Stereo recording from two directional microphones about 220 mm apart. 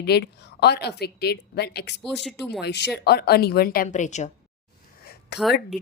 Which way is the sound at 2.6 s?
50° left (ahead or behind).